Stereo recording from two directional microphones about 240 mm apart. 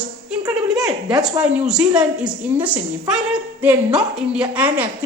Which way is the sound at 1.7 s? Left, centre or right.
Centre.